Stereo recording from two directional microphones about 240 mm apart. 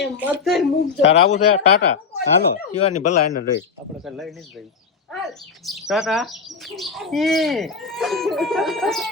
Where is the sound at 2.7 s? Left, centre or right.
Left.